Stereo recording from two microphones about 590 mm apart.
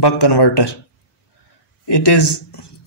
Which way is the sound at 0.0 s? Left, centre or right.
Left.